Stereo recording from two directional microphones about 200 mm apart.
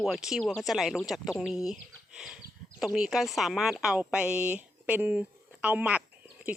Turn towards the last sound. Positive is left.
turn(degrees=-5)  # may be behind; listen again after turning